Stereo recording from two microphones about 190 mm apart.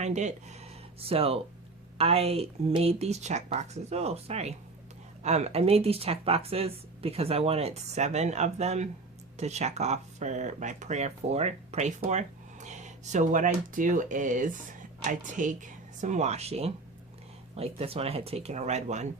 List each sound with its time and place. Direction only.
0.0 s speech: 35° right (ahead or behind)